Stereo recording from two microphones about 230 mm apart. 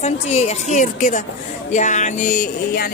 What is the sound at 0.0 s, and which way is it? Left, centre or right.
Speech, left.